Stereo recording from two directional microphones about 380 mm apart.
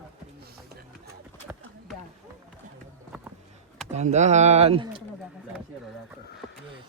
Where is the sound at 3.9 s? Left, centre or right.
Centre.